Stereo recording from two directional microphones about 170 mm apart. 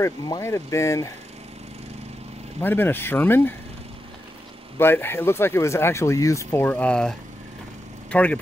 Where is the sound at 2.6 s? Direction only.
10° left (ahead or behind).